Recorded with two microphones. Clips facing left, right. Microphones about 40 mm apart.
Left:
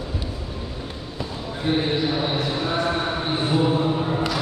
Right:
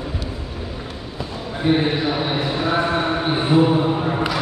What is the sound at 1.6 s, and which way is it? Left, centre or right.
A man's voice, right.